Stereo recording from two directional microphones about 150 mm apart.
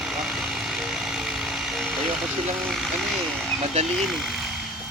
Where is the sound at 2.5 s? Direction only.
Centre (ahead or behind).